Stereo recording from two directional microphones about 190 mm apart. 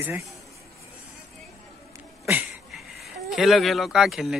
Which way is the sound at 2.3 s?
5° right (ahead or behind).